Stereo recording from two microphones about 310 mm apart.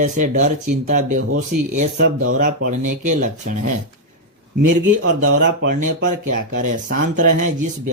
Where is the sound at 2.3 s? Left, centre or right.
Right.